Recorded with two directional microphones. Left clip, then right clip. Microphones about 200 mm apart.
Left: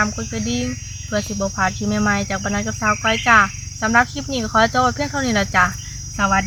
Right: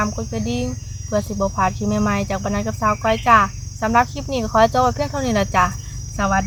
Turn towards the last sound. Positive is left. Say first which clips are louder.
# left 2 dB
turn(degrees=-25)  # may be behind; listen again after turning